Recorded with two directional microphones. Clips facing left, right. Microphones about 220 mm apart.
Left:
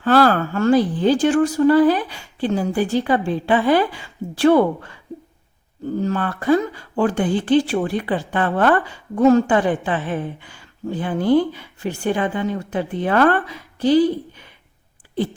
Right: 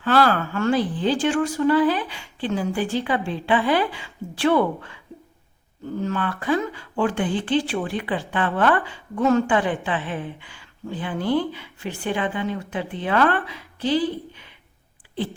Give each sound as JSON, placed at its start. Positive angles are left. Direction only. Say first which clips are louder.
{"t": 0.0, "sound": "speech", "louder": "left 4 dB", "side_deg": 45}
{"t": 6.0, "sound": "speech", "louder": "left 2 dB", "side_deg": 40}